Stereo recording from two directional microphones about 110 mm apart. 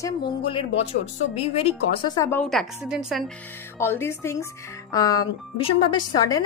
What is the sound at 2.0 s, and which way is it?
Speech, 35° left (ahead or behind).